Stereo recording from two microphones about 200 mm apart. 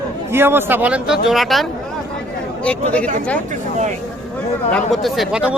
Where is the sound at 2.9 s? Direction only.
5° left (ahead or behind).